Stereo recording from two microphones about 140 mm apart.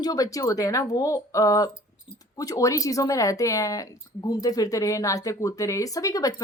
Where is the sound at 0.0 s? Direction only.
25° left (ahead or behind).